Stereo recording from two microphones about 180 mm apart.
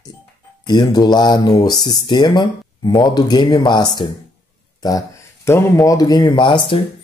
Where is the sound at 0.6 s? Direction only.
25° left (ahead or behind).